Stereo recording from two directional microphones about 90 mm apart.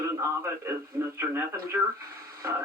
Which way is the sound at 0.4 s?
30° right (ahead or behind).